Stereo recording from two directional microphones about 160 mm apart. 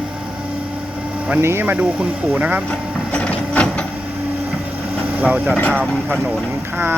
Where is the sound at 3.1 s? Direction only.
5° left (ahead or behind).